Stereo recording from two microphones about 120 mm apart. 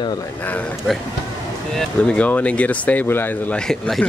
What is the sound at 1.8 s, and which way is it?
Speech, 10° left (ahead or behind).